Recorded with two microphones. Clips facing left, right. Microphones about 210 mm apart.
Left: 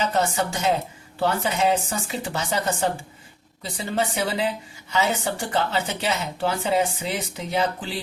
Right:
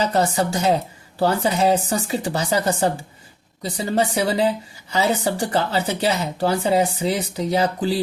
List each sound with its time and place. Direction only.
0.0 s a woman's voice: 35° right (ahead or behind)